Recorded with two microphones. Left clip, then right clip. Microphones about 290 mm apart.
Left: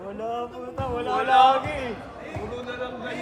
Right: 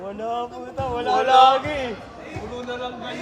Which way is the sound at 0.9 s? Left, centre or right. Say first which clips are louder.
Right 5 dB; right.